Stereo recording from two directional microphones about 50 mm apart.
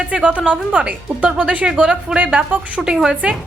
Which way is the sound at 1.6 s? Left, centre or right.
Centre.